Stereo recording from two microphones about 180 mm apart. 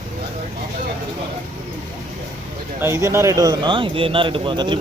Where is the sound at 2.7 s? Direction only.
15° right (ahead or behind).